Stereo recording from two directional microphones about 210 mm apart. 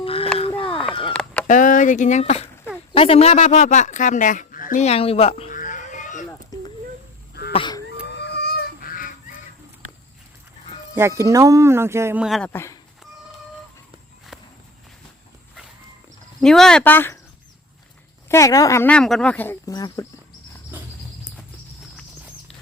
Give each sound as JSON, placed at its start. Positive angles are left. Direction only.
{"t": 0.0, "sound": "a sound", "side_deg": 25}
{"t": 1.1, "sound": "chicken", "side_deg": 5}
{"t": 1.5, "sound": "speech", "side_deg": 40}
{"t": 6.5, "sound": "a sound", "side_deg": 15}
{"t": 8.0, "sound": "honk", "side_deg": 55}
{"t": 10.9, "sound": "speech", "side_deg": -15}
{"t": 12.5, "sound": "speech", "side_deg": 15}
{"t": 16.4, "sound": "speech", "side_deg": 0}
{"t": 18.3, "sound": "speech", "side_deg": 15}